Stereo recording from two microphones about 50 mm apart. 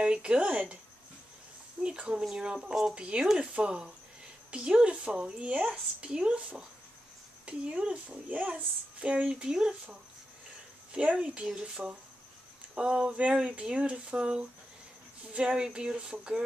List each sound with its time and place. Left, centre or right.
0.0 s a woman's voice: right
1.8 s a woman's voice: centre
9.3 s speech: centre
10.9 s speech: right
13.1 s a woman's voice: right